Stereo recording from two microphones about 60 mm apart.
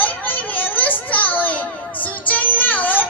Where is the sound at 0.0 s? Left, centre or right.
Left.